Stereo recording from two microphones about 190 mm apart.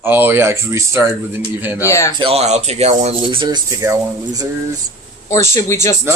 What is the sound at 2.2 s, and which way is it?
Speech, 35° right (ahead or behind).